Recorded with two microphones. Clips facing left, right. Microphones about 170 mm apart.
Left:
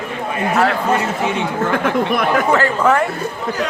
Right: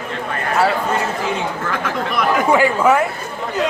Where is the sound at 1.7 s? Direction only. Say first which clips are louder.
Left 7 dB; 55° left (ahead or behind).